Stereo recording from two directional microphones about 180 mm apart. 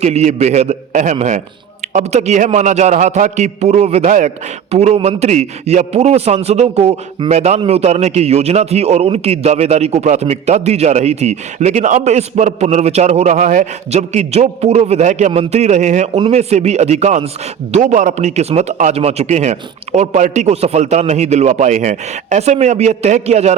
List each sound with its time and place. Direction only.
0.0 s a man's voice: 35° right (ahead or behind)